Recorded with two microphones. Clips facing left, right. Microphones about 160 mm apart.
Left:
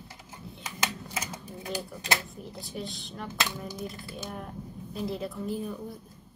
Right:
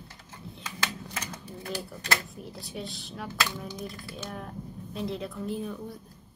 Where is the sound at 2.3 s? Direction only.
Centre (ahead or behind).